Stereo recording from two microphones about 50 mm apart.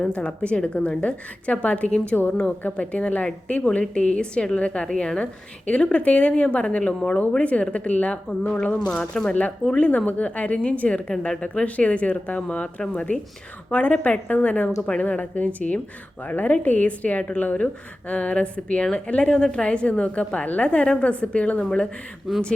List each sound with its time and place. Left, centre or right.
0.1 s a woman's voice: left
8.9 s speech: centre
9.7 s a woman's voice: left
14.8 s a woman's voice: left
15.0 s a woman's voice: left
21.6 s speech: centre
22.3 s speech: centre